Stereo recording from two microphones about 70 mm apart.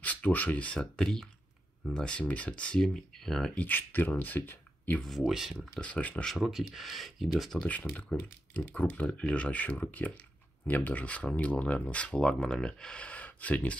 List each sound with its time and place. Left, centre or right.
0.0 s speech: left
2.8 s speech: centre
3.5 s speech: left
5.3 s speech: centre
5.8 s speech: left
6.2 s speech: centre
7.6 s speech: left